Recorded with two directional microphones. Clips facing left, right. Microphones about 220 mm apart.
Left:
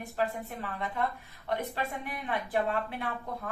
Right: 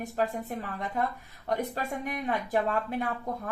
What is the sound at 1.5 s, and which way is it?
Speech, 45° right (ahead or behind).